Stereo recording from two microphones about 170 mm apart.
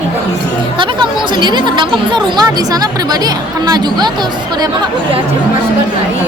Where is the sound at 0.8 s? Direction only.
30° right (ahead or behind).